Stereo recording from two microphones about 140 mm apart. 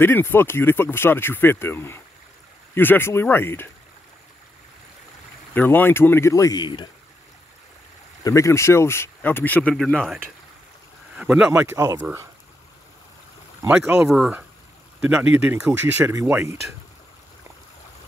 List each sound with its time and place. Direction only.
0.0 s speech: 15° left (ahead or behind)
5.5 s speech: 15° left (ahead or behind); by 6.9 s 30° left (ahead or behind)
8.2 s speech: 20° left (ahead or behind); by 10.2 s 5° left (ahead or behind)
11.1 s speech: 10° right (ahead or behind)
11.6 s speech: 20° right (ahead or behind)
13.7 s speech: 5° right (ahead or behind)